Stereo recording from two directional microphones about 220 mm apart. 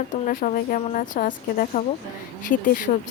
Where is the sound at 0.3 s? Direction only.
40° left (ahead or behind).